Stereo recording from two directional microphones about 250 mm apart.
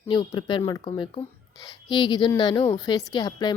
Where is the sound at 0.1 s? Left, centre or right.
Centre.